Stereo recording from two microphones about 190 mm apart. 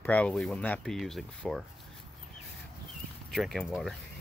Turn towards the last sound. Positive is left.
turn(degrees=0)  # may be behind; listen again after turning